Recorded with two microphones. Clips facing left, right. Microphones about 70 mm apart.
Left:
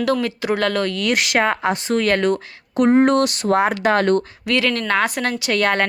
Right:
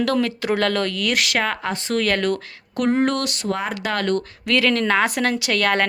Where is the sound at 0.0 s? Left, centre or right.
Centre.